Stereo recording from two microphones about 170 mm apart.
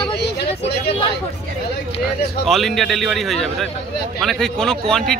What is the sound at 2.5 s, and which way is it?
Speech, centre (ahead or behind).